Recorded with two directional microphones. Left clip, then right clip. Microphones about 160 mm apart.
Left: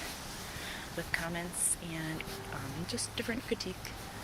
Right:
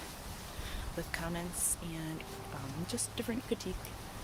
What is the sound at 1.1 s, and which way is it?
Speech, 35° right (ahead or behind).